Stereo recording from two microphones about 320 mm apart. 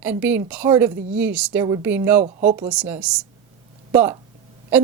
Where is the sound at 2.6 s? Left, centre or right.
Centre.